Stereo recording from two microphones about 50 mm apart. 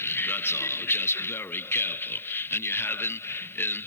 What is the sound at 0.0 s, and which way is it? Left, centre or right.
A man's voice, left.